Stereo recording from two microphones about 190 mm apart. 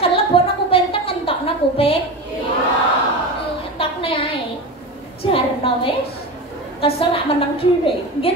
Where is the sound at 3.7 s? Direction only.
30° left (ahead or behind).